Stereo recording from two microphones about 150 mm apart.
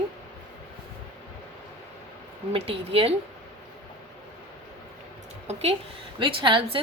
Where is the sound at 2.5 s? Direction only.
40° right (ahead or behind).